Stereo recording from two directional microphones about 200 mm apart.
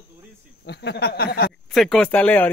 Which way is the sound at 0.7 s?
55° left (ahead or behind).